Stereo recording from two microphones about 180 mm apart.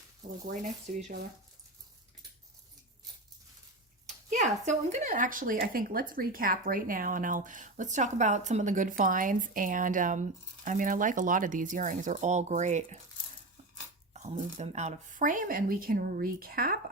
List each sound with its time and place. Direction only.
0.9 s speech: 45° right (ahead or behind)
4.0 s speech: 40° right (ahead or behind)
14.1 s speech: 40° right (ahead or behind); by 16.7 s 55° right (ahead or behind)